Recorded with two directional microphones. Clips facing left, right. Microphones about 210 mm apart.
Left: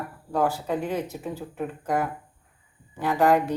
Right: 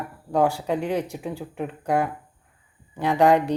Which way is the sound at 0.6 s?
15° right (ahead or behind).